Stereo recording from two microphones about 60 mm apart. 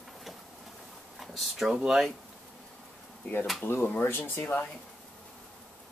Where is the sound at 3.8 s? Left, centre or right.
Left.